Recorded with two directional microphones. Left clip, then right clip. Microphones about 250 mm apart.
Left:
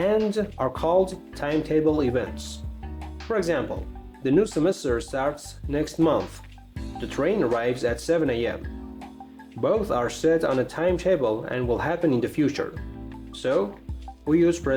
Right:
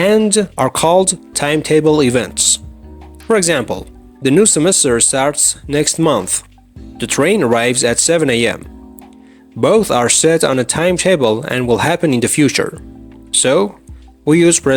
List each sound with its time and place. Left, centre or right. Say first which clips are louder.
0.3 s speech: right 11 dB; right
9.6 s speech: right 12 dB; right